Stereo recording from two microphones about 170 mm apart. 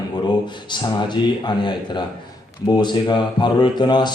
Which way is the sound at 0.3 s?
25° left (ahead or behind).